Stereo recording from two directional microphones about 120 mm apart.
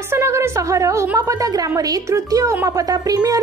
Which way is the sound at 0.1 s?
20° right (ahead or behind).